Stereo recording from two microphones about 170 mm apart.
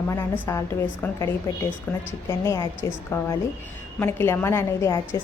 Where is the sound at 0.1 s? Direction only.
15° left (ahead or behind).